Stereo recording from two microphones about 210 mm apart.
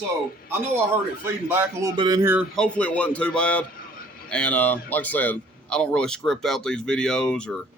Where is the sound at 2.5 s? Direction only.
5° left (ahead or behind).